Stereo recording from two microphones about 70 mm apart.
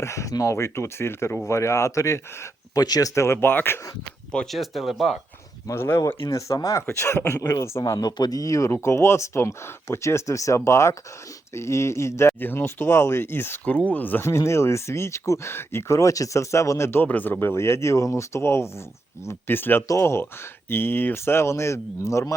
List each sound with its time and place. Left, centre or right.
0.0 s speech: left
2.7 s speech: left
3.2 s speech: left
4.4 s speech: centre
5.7 s speech: left
6.3 s speech: left
6.8 s speech: left
7.9 s speech: left
13.7 s speech: left
14.3 s speech: left
17.1 s speech: left